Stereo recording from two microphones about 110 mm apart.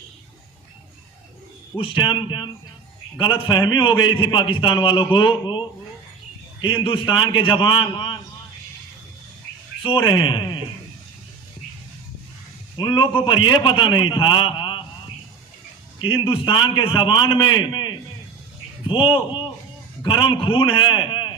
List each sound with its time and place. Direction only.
1.8 s a man's voice: 45° left (ahead or behind)
7.0 s a man's voice: 40° left (ahead or behind)
9.8 s a man's voice: 50° left (ahead or behind)
12.7 s a man's voice: 45° left (ahead or behind)
16.2 s a man's voice: 50° left (ahead or behind)
19.1 s a man's voice: 50° left (ahead or behind)